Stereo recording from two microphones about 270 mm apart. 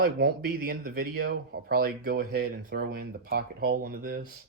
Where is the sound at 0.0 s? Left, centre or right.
Right.